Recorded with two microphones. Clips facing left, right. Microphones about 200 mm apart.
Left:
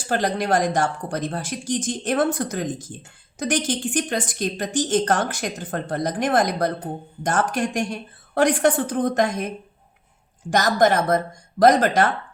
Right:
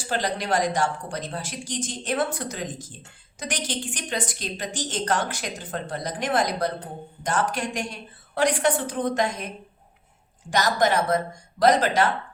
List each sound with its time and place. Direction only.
0.1 s a woman's voice: 50° left (ahead or behind)
10.5 s a woman's voice: 50° left (ahead or behind)